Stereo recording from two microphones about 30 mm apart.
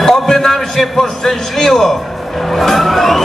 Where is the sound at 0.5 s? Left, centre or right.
Centre.